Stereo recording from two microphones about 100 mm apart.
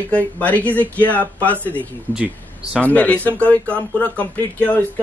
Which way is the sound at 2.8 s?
15° left (ahead or behind).